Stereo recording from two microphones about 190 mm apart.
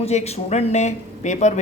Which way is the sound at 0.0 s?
35° left (ahead or behind).